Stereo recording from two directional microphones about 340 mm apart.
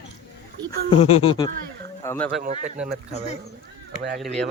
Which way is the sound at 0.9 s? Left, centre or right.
Centre.